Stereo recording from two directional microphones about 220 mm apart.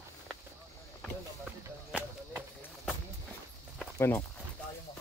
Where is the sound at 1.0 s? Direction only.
5° right (ahead or behind).